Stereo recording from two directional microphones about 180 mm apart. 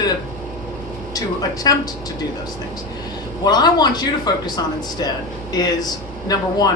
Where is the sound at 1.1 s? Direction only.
20° left (ahead or behind).